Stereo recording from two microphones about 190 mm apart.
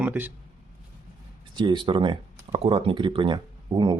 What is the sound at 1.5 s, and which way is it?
Speech, 25° right (ahead or behind).